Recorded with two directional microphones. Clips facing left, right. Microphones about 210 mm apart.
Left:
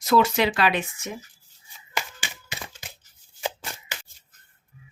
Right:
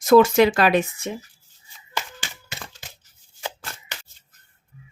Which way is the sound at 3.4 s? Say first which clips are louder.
Left 3 dB; 15° left (ahead or behind).